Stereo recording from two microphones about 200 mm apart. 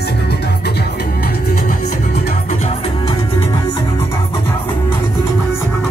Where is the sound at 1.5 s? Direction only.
40° left (ahead or behind); by 3.8 s 20° left (ahead or behind).